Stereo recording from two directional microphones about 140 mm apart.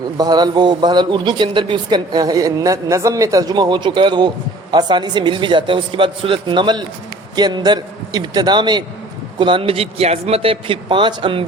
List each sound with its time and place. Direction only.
0.2 s a man's voice: 30° right (ahead or behind)